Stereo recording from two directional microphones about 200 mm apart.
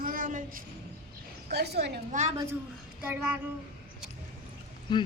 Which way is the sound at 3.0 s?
10° right (ahead or behind).